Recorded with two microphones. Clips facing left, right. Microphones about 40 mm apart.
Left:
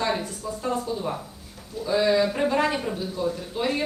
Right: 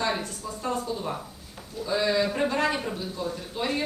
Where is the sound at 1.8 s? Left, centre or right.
Centre.